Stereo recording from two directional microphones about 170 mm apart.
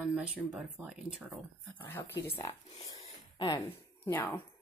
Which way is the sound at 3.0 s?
30° left (ahead or behind).